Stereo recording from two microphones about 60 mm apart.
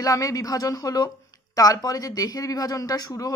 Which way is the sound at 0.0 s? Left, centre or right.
Left.